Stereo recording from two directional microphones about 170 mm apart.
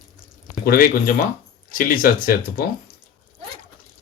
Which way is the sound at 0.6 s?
60° left (ahead or behind).